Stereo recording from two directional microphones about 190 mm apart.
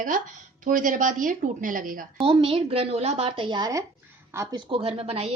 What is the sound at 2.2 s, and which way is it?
A woman's voice, 30° right (ahead or behind).